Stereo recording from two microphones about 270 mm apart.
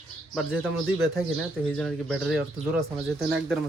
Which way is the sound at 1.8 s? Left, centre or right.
Centre.